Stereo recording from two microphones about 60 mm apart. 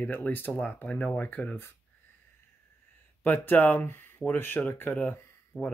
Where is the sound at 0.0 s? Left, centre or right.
Left.